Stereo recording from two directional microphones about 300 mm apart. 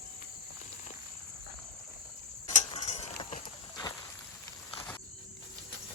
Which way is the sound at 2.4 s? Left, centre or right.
Left.